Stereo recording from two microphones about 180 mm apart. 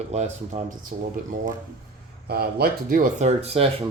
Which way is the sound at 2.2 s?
55° right (ahead or behind).